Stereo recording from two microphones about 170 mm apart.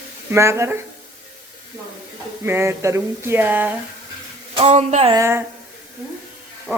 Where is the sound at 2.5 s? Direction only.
15° right (ahead or behind).